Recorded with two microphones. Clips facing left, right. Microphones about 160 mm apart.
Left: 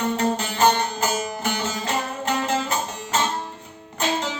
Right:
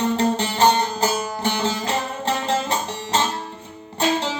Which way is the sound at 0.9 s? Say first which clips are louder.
Right 2 dB; 35° right (ahead or behind).